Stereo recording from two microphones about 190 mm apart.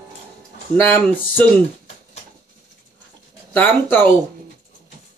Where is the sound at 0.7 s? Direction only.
10° left (ahead or behind).